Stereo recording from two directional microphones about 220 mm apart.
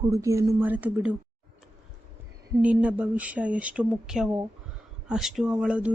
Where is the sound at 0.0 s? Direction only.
15° right (ahead or behind).